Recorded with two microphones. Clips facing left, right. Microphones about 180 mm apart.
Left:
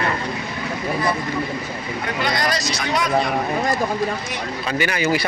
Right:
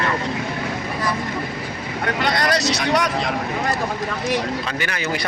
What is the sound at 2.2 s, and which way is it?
Speech, 65° right (ahead or behind).